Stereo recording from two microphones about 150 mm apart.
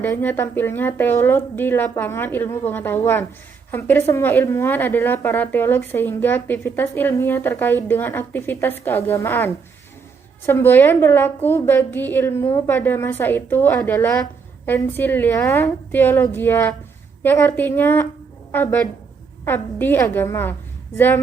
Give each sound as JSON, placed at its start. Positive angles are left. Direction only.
{"t": 0.0, "sound": "a woman's voice", "side_deg": 10}